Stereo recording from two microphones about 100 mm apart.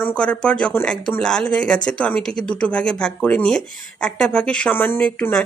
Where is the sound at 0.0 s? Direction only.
10° left (ahead or behind).